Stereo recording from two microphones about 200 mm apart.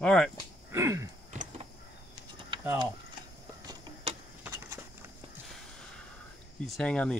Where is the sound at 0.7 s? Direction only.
15° right (ahead or behind).